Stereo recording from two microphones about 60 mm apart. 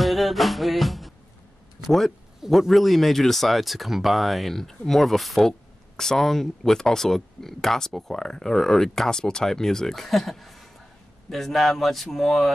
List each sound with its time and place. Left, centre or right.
0.0 s music: centre
1.9 s speech: centre